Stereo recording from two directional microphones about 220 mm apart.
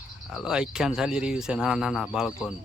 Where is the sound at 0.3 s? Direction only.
5° right (ahead or behind).